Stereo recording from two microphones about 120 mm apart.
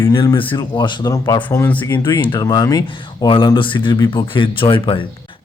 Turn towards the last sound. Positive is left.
turn(degrees=45)  # may be behind; listen again after turning